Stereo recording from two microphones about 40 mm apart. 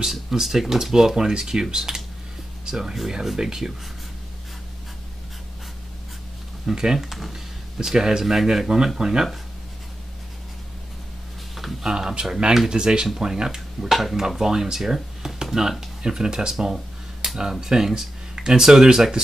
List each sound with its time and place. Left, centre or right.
0.0 s speech: centre
6.6 s speech: centre
7.0 s speech: centre
11.8 s speech: centre